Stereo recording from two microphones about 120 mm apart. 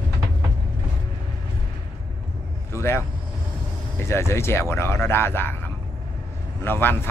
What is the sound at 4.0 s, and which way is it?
Speech, 20° left (ahead or behind).